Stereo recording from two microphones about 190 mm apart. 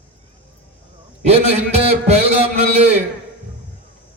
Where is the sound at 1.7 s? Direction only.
35° right (ahead or behind).